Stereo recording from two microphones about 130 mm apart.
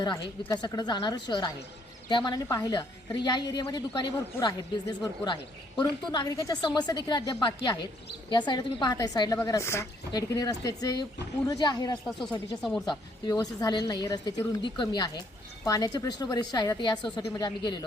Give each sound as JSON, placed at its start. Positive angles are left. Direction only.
{"t": 0.4, "sound": "a woman's voice", "side_deg": 30}